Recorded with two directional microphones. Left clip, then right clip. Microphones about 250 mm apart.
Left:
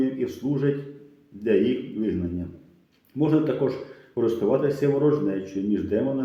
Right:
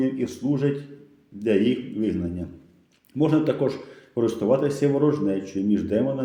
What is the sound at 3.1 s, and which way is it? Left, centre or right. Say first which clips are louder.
Speech: right 1 dB; right.